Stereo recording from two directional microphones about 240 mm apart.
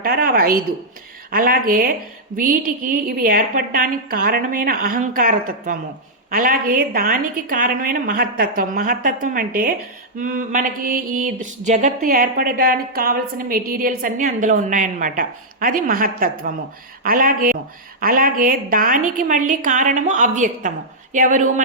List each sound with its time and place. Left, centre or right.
0.0 s a woman's voice: right
1.3 s mantra: right